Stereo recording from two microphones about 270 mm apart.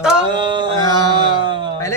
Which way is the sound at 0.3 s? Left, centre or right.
Centre.